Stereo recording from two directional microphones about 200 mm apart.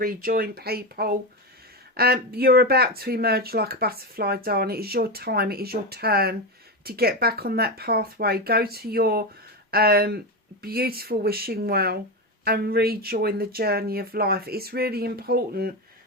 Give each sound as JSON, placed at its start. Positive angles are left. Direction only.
{"t": 0.0, "sound": "speech", "side_deg": -45}